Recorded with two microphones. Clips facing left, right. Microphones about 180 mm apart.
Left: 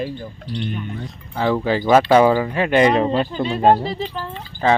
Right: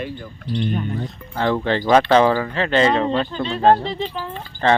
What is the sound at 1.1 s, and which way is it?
Speech, centre (ahead or behind).